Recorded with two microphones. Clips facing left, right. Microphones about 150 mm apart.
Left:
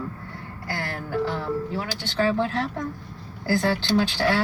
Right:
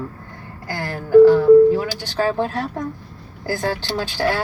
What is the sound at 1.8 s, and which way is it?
Speech, 45° right (ahead or behind).